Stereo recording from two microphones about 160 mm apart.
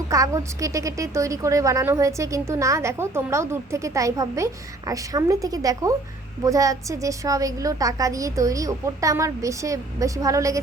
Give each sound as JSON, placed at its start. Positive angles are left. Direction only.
{"t": 0.1, "sound": "a woman's voice", "side_deg": -20}